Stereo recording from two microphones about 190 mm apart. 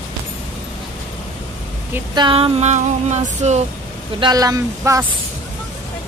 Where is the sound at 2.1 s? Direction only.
25° right (ahead or behind).